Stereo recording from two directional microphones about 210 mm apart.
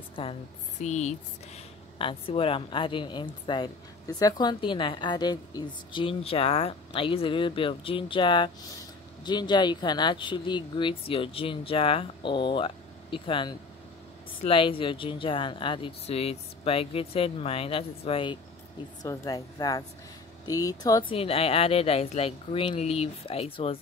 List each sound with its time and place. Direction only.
0.1 s a woman's voice: 25° left (ahead or behind)